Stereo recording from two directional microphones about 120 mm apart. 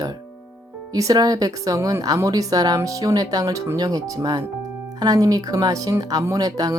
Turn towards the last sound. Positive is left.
turn(degrees=-30)  # may be behind; listen again after turning